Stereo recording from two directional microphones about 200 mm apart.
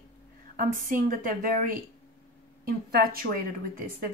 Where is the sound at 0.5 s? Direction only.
45° right (ahead or behind).